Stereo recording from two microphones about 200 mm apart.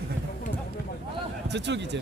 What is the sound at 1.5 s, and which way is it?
Speech, 60° right (ahead or behind).